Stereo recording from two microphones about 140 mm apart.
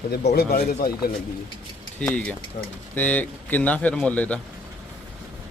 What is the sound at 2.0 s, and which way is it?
Speech, 10° left (ahead or behind).